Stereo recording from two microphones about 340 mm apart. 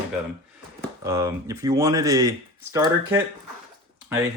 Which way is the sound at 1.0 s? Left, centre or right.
Centre.